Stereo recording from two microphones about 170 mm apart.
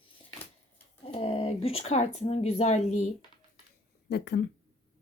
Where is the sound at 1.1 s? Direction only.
35° left (ahead or behind).